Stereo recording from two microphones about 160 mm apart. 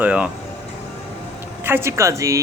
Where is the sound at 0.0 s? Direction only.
10° right (ahead or behind).